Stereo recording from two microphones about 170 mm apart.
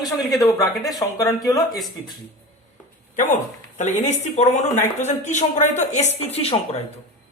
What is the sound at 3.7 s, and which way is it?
Speech, 45° left (ahead or behind).